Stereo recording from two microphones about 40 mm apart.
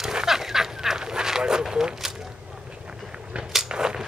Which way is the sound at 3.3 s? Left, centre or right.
Right.